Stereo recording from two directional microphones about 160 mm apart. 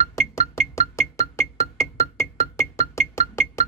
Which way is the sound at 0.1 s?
20° left (ahead or behind).